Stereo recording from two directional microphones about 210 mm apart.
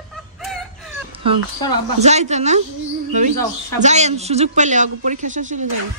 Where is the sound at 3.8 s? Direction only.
30° right (ahead or behind).